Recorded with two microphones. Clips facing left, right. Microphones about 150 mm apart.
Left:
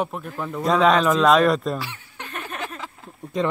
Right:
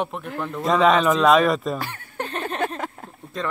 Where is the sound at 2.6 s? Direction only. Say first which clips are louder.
Right 7 dB; 50° right (ahead or behind).